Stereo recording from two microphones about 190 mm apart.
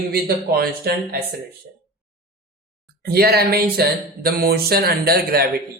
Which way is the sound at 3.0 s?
55° right (ahead or behind).